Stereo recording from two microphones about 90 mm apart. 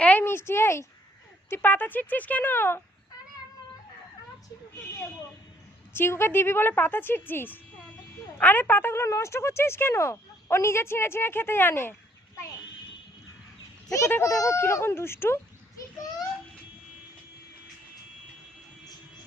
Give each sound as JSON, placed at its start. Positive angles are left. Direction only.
{"t": 0.0, "sound": "speech", "side_deg": 20}
{"t": 5.9, "sound": "speech", "side_deg": 25}
{"t": 13.8, "sound": "speech", "side_deg": 40}